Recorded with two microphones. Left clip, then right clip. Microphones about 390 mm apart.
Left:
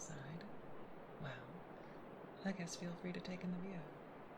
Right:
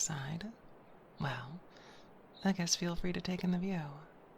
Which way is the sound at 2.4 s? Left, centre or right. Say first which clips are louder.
Right 12 dB; centre.